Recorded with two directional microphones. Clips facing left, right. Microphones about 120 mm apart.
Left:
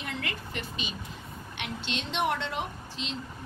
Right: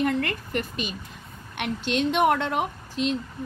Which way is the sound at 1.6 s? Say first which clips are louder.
Right 11 dB; 50° right (ahead or behind).